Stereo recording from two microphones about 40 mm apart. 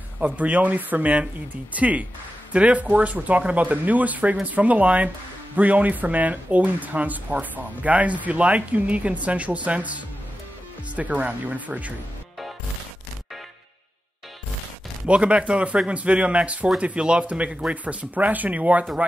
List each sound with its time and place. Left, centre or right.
0.2 s speech: right
15.0 s speech: right